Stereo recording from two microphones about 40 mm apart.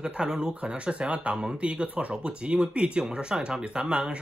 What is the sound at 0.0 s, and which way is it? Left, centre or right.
Speech, centre.